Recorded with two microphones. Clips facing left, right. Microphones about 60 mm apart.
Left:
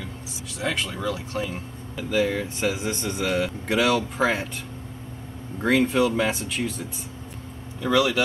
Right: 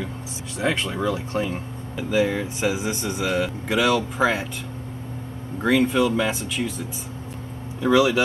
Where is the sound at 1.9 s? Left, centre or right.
Centre.